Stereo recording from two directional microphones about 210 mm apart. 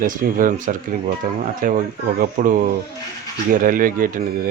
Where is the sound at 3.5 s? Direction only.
40° right (ahead or behind).